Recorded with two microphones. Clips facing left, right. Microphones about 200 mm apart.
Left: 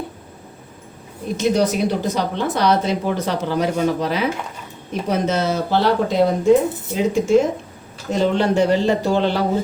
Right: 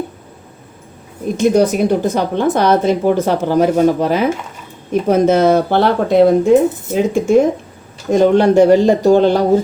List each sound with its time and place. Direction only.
1.4 s speech: 50° right (ahead or behind)